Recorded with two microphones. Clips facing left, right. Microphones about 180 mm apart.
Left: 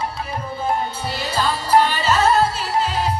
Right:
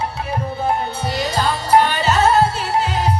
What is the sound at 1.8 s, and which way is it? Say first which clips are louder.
Music: right 2 dB; 60° right (ahead or behind).